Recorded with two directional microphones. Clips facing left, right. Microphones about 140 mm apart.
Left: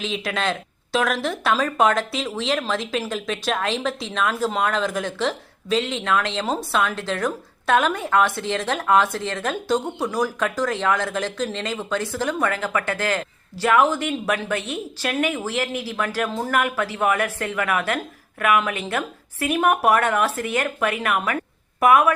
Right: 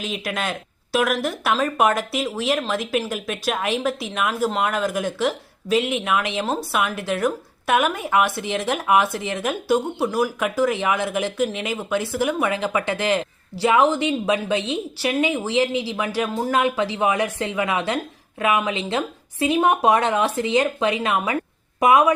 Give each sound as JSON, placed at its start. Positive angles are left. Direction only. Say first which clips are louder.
{"t": 0.0, "sound": "a woman's voice", "louder": "left 2 dB", "side_deg": -5}